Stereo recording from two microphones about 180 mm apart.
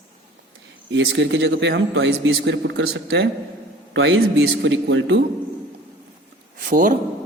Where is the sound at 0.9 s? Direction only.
85° right.